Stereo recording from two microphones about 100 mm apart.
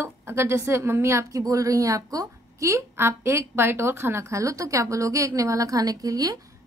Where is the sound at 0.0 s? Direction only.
25° right (ahead or behind).